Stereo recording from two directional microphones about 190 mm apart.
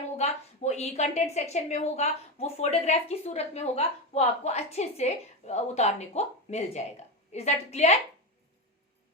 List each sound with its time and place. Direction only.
0.2 s a woman's voice: 35° left (ahead or behind)